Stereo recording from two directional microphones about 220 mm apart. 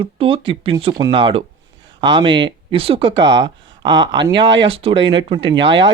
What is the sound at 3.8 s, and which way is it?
Speech, 55° right (ahead or behind).